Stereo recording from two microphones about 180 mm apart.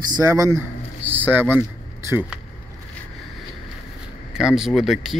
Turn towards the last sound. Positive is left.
turn(degrees=0)  # may be behind; listen again after turning